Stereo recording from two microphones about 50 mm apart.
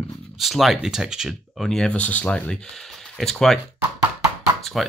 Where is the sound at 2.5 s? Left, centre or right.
Centre.